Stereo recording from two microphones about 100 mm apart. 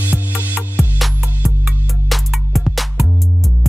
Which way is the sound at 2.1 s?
Centre (ahead or behind).